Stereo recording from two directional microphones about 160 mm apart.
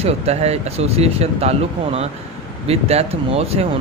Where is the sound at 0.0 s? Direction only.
40° right (ahead or behind).